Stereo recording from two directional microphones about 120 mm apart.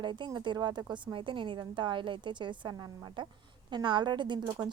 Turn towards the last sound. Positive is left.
turn(degrees=-40)  # may be behind; listen again after turning